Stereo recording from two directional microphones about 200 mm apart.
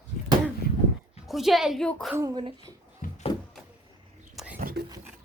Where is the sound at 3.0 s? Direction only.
40° left (ahead or behind).